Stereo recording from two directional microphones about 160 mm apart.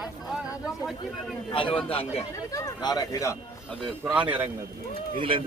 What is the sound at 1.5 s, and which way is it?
Speech, 35° left (ahead or behind).